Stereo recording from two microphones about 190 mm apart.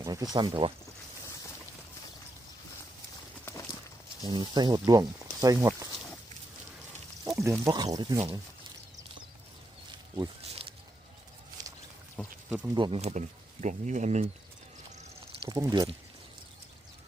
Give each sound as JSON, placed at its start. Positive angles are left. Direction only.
{"t": 0.0, "sound": "speech", "side_deg": -20}
{"t": 4.2, "sound": "speech", "side_deg": -25}
{"t": 7.3, "sound": "speech", "side_deg": -15}
{"t": 11.6, "sound": "a sound", "side_deg": -20}
{"t": 12.5, "sound": "speech", "side_deg": -5}
{"t": 12.7, "sound": "speech", "side_deg": -25}
{"t": 15.3, "sound": "a sound", "side_deg": -25}
{"t": 15.5, "sound": "speech", "side_deg": -20}